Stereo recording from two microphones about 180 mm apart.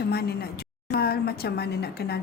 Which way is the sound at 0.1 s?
60° left (ahead or behind).